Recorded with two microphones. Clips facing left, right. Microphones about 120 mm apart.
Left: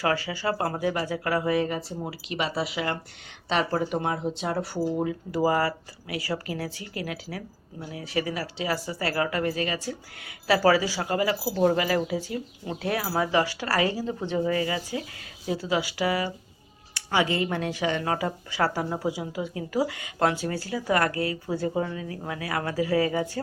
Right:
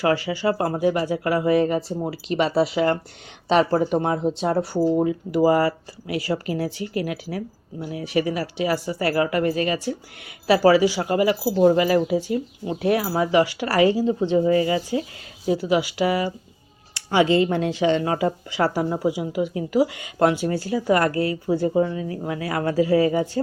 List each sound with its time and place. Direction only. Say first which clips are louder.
0.3 s speech: right 5 dB; 20° right (ahead or behind)
3.6 s speech: right 5 dB; 25° right (ahead or behind)